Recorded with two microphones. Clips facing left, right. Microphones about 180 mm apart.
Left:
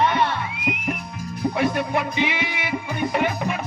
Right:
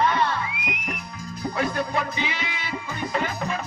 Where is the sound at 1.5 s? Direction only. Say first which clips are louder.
Left 2 dB; 20° left (ahead or behind).